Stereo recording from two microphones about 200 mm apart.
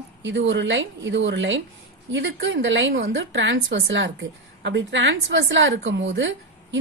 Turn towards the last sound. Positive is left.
turn(degrees=-65)  # may be behind; listen again after turning